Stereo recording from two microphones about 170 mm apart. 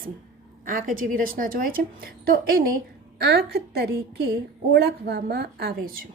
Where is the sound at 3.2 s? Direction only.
70° right (ahead or behind).